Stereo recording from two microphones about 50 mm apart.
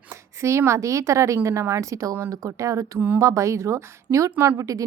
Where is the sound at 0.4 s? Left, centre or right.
Right.